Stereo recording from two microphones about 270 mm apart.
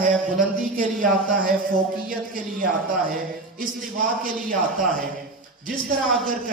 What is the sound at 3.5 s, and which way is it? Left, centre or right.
A man's voice, right.